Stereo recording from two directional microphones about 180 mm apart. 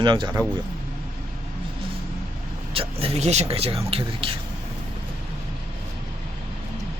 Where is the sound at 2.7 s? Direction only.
30° right (ahead or behind).